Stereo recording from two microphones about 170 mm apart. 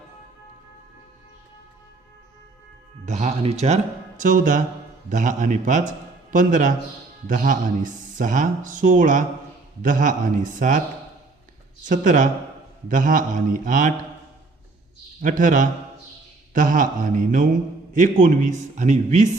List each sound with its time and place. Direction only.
3.1 s speech: 40° right (ahead or behind)
11.9 s speech: 50° right (ahead or behind)
15.2 s speech: 50° right (ahead or behind)